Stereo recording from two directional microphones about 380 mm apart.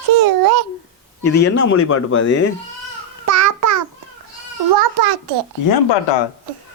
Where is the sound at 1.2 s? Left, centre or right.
Left.